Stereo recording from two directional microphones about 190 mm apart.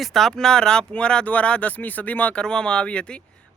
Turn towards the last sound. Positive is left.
turn(degrees=5)  # may be behind; listen again after turning